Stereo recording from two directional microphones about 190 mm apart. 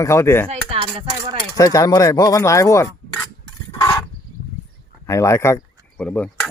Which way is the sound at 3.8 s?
20° left (ahead or behind).